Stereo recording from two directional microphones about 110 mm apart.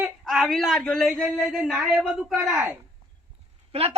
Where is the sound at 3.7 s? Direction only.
65° right (ahead or behind).